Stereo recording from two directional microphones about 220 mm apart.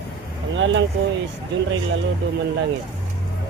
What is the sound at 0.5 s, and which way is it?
Speech, 60° right (ahead or behind).